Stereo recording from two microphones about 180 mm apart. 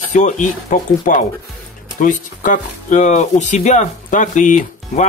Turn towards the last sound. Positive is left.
turn(degrees=45)  # may be behind; listen again after turning